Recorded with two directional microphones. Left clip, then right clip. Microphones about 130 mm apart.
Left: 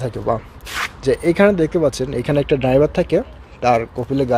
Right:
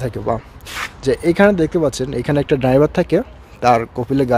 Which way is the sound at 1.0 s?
35° right (ahead or behind).